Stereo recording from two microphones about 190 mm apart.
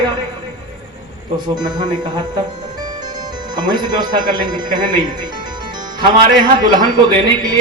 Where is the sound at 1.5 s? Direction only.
20° right (ahead or behind).